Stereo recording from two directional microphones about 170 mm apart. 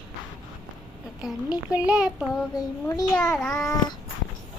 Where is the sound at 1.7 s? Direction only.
5° right (ahead or behind).